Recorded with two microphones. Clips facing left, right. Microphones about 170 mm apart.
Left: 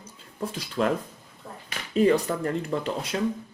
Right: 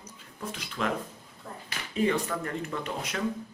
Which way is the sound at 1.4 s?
20° left (ahead or behind).